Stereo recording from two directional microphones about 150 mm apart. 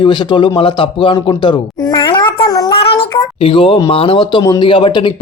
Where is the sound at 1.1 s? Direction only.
25° left (ahead or behind).